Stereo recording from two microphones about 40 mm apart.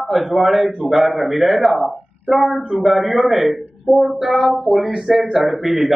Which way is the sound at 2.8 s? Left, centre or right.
Centre.